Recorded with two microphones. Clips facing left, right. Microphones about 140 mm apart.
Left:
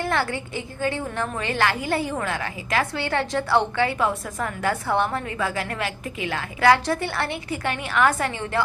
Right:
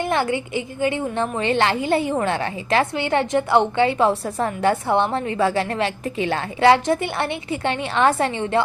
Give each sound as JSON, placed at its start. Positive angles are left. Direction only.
{"t": 0.0, "sound": "a woman's voice", "side_deg": -20}